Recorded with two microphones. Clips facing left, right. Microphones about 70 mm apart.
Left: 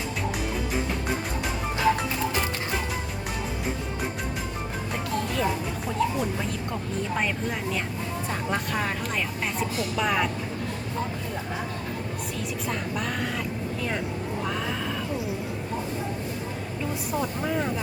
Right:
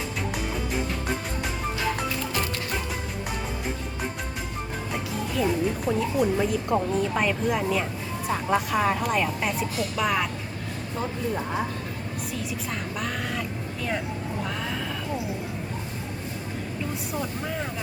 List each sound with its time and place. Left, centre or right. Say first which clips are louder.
5.1 s speech: right 1 dB; centre
17.2 s speech: left 5 dB; centre